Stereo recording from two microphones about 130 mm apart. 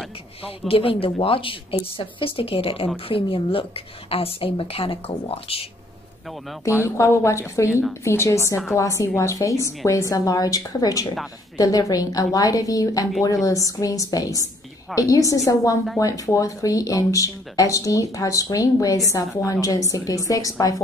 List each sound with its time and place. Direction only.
0.7 s a woman's voice: 45° left (ahead or behind)
6.8 s speech: 20° left (ahead or behind)